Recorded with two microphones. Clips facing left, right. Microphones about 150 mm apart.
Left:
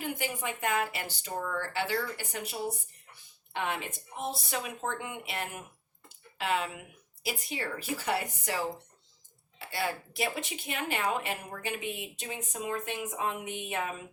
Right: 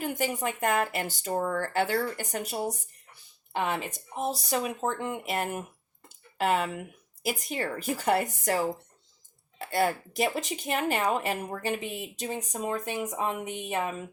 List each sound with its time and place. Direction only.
0.0 s speech: 40° right (ahead or behind)